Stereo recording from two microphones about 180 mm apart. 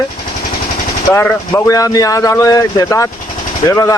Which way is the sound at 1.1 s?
15° left (ahead or behind).